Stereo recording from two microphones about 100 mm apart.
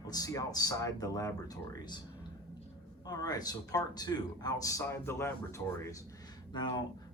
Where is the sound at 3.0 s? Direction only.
40° left (ahead or behind).